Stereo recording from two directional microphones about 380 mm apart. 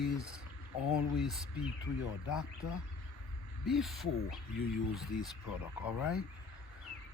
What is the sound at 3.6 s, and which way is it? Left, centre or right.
Owl, centre.